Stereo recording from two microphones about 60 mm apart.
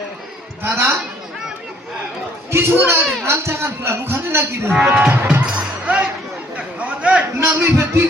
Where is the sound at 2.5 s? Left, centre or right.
Right.